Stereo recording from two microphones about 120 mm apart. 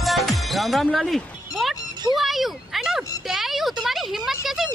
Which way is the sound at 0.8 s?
5° left (ahead or behind).